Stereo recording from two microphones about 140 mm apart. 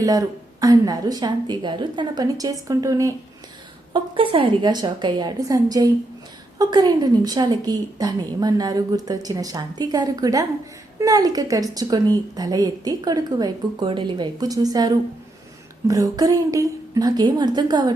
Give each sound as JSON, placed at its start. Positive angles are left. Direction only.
{"t": 0.0, "sound": "a woman's voice", "side_deg": -25}
{"t": 3.9, "sound": "a woman's voice", "side_deg": -35}